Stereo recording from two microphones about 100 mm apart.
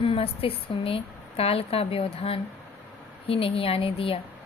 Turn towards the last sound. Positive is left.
turn(degrees=70)  # may be behind; listen again after turning